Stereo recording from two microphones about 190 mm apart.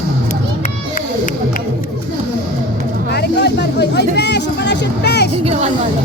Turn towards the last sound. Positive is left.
turn(degrees=-35)  # may be behind; listen again after turning